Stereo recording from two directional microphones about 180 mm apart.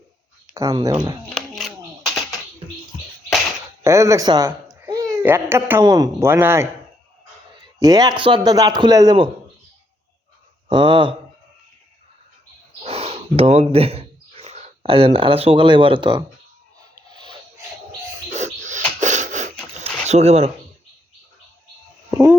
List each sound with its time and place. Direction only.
0.7 s a man's voice: 25° right (ahead or behind)
1.4 s coin: centre (ahead or behind)
3.8 s speech: 15° right (ahead or behind)
7.8 s a man's voice: 20° right (ahead or behind)
10.7 s a man's voice: 25° right (ahead or behind)
12.8 s speech: 35° right (ahead or behind)
16.9 s a sound: 25° right (ahead or behind)
18.3 s bird: 40° right (ahead or behind)
18.9 s a sound: 40° right (ahead or behind)
22.1 s a sound: 15° right (ahead or behind)